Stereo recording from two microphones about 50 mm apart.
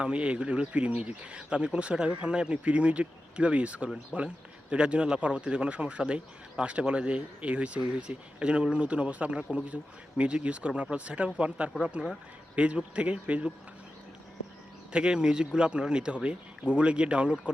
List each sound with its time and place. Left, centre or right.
0.0 s speech: right
14.9 s speech: centre